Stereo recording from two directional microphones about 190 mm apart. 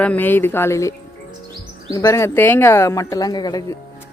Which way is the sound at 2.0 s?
15° left (ahead or behind).